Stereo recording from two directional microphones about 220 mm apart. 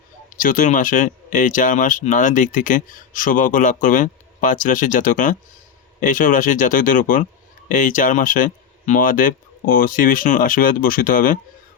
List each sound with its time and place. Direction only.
0.3 s speech: 40° left (ahead or behind)